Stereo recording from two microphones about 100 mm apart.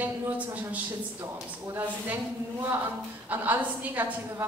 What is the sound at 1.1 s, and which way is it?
A woman's voice, 25° right (ahead or behind).